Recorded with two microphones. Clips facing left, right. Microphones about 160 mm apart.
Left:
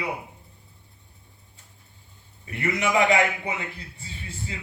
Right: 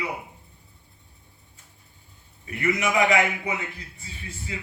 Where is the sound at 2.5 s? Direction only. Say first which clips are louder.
Even; 30° left (ahead or behind).